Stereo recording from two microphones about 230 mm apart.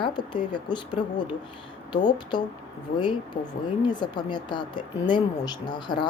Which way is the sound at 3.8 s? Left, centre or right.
Centre.